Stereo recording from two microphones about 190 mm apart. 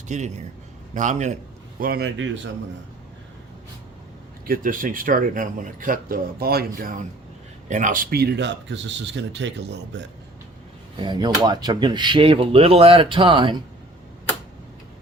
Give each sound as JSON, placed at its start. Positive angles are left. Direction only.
{"t": 0.1, "sound": "a man's voice", "side_deg": -40}
{"t": 1.8, "sound": "speech", "side_deg": -55}
{"t": 2.1, "sound": "speech", "side_deg": -75}
{"t": 4.4, "sound": "speech", "side_deg": -50}
{"t": 11.0, "sound": "speech", "side_deg": -20}